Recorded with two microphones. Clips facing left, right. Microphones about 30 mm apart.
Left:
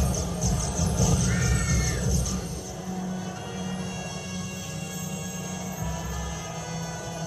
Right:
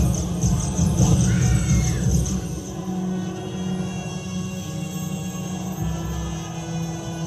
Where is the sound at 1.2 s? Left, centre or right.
Left.